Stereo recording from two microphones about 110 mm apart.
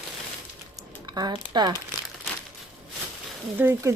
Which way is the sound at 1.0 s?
40° right (ahead or behind).